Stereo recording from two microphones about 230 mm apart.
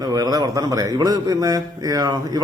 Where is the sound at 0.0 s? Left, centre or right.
Centre.